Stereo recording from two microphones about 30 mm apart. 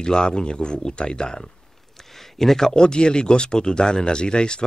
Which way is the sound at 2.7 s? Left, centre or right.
Left.